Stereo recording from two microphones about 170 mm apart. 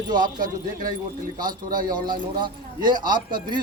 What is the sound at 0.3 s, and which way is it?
Speech, 55° right (ahead or behind).